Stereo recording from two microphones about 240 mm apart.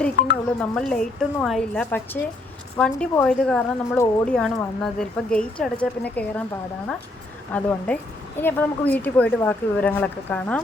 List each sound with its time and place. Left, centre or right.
0.2 s speech: left
0.6 s a woman's voice: centre
7.5 s a woman's voice: centre